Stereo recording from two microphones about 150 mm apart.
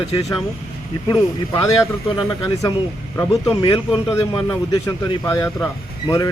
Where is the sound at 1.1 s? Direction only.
25° left (ahead or behind).